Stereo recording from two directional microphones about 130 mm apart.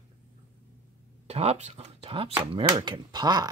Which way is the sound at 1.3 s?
50° right (ahead or behind).